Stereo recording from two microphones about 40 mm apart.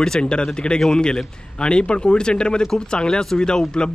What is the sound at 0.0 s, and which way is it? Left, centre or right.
Speech, centre.